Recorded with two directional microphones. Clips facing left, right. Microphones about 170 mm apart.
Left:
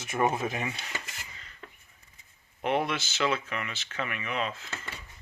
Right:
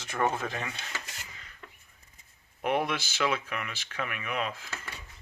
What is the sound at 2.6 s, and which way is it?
Speech, 5° right (ahead or behind).